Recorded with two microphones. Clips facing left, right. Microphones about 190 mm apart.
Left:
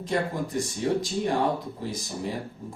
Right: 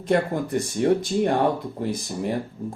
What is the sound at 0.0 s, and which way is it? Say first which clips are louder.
Speech: right 5 dB; 60° right (ahead or behind).